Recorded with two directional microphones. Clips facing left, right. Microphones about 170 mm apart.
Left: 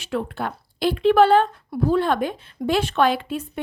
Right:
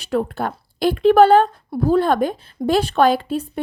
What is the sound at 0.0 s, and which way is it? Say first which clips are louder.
A woman's voice: right 5 dB; 40° right (ahead or behind).